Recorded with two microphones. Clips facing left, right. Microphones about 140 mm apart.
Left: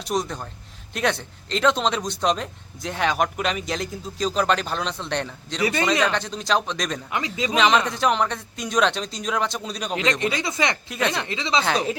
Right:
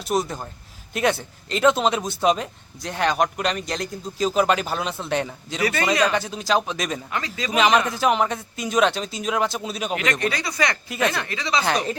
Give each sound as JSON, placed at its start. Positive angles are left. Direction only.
{"t": 0.0, "sound": "speech", "side_deg": -5}
{"t": 7.1, "sound": "speech", "side_deg": 20}
{"t": 7.5, "sound": "speech", "side_deg": -5}
{"t": 9.9, "sound": "speech", "side_deg": 20}
{"t": 10.8, "sound": "speech", "side_deg": -5}
{"t": 11.1, "sound": "speech", "side_deg": 20}
{"t": 11.6, "sound": "speech", "side_deg": 0}